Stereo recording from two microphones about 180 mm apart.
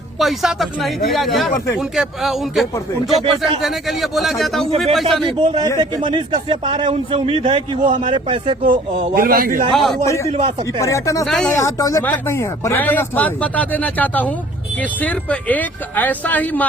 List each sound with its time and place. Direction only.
0.2 s a man's voice: centre (ahead or behind)
3.2 s speech: 30° right (ahead or behind)
3.6 s a man's voice: centre (ahead or behind)
5.3 s speech: 25° right (ahead or behind)
8.6 s a man's voice: 50° right (ahead or behind)
9.7 s a man's voice: centre (ahead or behind)
10.2 s speech: 35° right (ahead or behind)
10.7 s speech: 15° left (ahead or behind)